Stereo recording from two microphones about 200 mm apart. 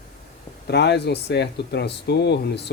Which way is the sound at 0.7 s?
55° left (ahead or behind).